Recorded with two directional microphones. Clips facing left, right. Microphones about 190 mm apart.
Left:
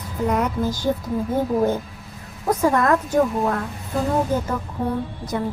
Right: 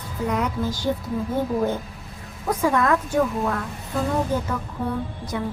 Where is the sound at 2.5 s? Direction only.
40° left (ahead or behind).